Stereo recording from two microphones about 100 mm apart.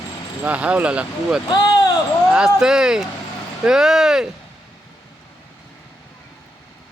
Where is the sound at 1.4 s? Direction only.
45° left (ahead or behind).